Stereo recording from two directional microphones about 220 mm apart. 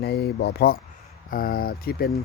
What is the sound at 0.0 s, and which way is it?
Speech, 45° left (ahead or behind).